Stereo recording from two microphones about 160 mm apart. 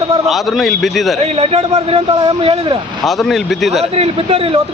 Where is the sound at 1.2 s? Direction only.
40° right (ahead or behind).